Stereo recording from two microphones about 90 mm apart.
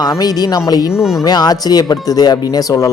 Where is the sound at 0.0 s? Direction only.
45° left (ahead or behind).